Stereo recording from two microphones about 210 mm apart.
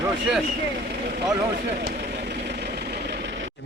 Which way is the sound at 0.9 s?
45° right (ahead or behind).